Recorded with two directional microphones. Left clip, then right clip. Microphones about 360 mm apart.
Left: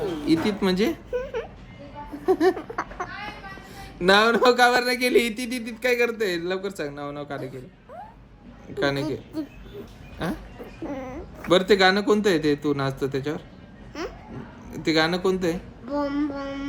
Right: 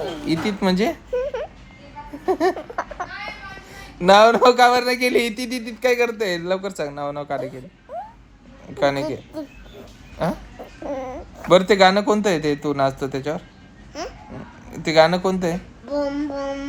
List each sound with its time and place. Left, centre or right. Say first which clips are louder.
0.3 s speech: right 1 dB; centre
2.2 s a sound: right 1 dB; centre
3.8 s speech: right 6 dB; centre
8.7 s speech: right 5 dB; centre
10.8 s cat: right 6 dB; centre
11.7 s speech: right 3 dB; centre
14.7 s speech: right 7 dB; centre
15.9 s child singing: right 3 dB; centre